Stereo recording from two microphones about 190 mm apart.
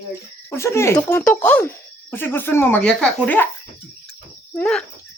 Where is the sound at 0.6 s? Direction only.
15° left (ahead or behind).